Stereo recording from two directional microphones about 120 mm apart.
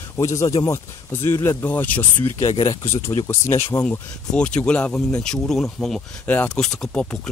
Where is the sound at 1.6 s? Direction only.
15° left (ahead or behind).